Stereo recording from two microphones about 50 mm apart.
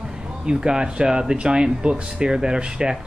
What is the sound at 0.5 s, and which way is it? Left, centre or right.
Speech, centre.